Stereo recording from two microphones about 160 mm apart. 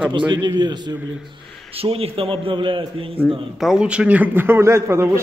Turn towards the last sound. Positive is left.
turn(degrees=-15)  # may be behind; listen again after turning